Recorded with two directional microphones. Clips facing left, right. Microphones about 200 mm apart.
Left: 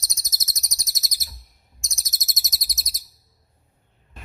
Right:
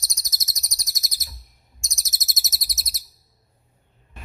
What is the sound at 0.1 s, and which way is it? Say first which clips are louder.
Bird: even; 25° left (ahead or behind).